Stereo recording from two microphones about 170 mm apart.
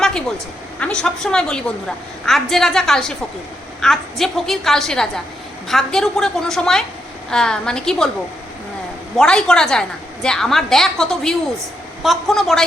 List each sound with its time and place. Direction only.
0.0 s a sound: 5° left (ahead or behind)
0.8 s a woman's voice: 5° left (ahead or behind)
9.1 s a woman's voice: 5° left (ahead or behind)